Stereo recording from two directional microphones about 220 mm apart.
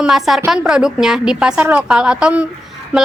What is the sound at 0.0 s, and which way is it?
A woman's voice, centre (ahead or behind).